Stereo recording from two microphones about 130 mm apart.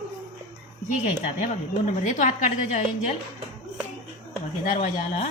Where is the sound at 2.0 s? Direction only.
70° left (ahead or behind).